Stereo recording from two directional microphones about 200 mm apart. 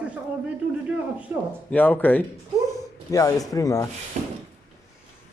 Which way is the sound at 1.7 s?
10° left (ahead or behind).